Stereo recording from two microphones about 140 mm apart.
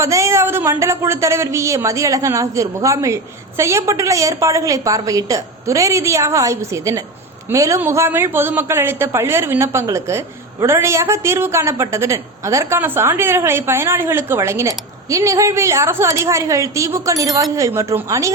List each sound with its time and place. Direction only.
0.0 s speech: 20° right (ahead or behind)